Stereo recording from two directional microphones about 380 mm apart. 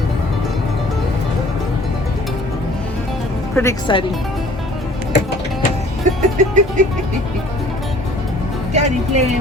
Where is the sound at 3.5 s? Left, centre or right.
Centre.